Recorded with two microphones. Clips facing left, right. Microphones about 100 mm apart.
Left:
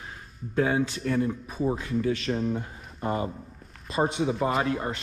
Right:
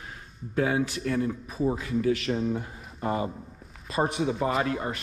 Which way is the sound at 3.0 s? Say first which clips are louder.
Even; 25° right (ahead or behind).